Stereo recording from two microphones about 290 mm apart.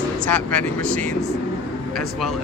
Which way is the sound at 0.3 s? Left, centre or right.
Centre.